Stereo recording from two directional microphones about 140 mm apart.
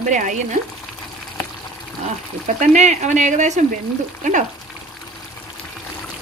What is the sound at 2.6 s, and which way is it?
Speech, 55° right (ahead or behind).